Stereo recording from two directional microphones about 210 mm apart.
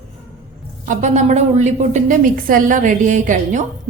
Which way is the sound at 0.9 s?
35° right (ahead or behind).